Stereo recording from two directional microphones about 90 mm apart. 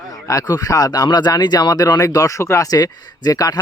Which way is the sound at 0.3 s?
40° left (ahead or behind).